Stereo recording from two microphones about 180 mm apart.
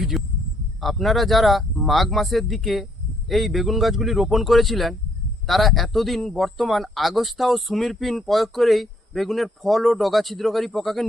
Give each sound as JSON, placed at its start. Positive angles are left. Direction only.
{"t": 0.1, "sound": "speech", "side_deg": 0}